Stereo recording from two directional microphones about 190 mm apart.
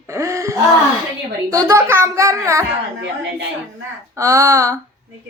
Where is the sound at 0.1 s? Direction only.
15° right (ahead or behind).